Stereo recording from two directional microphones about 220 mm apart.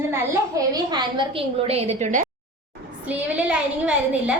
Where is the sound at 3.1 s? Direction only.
5° right (ahead or behind).